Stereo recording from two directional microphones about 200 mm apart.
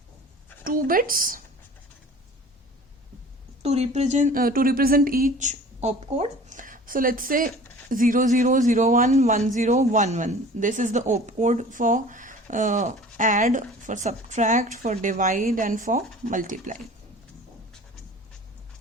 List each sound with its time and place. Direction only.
0.6 s speech: 45° right (ahead or behind)
3.6 s speech: 35° right (ahead or behind)